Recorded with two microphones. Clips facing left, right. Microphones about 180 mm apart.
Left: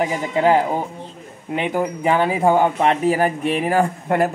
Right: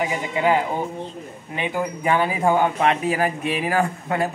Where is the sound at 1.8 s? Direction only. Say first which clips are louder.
Left 2 dB; 25° left (ahead or behind).